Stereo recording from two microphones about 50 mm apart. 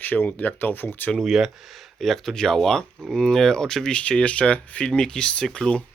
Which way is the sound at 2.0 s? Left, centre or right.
Centre.